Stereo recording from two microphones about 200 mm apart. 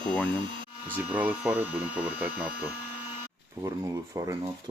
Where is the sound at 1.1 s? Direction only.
5° right (ahead or behind).